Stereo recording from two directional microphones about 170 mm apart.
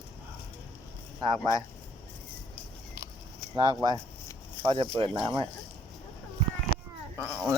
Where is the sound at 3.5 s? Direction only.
25° right (ahead or behind).